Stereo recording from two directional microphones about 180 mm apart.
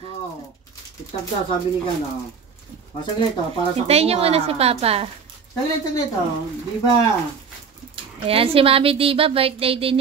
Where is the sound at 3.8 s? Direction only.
35° right (ahead or behind).